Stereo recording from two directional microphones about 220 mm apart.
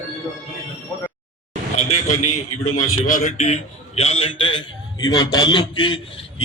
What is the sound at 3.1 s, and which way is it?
A man's voice, 30° left (ahead or behind).